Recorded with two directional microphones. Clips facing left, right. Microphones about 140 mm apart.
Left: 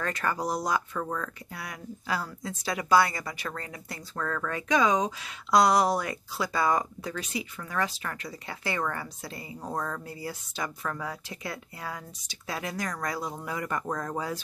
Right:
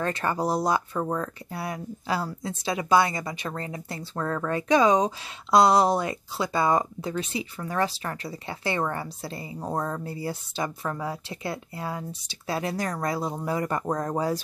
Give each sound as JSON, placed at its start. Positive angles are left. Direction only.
{"t": 0.0, "sound": "speech", "side_deg": -25}